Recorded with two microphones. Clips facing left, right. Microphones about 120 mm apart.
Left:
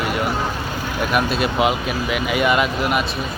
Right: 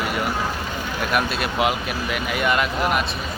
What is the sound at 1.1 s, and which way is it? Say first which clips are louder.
Speech: left 3 dB; centre (ahead or behind).